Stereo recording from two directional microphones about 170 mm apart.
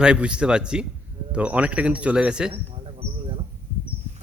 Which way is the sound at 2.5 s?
30° right (ahead or behind).